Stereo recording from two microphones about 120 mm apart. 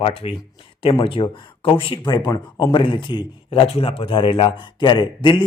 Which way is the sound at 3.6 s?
55° left (ahead or behind).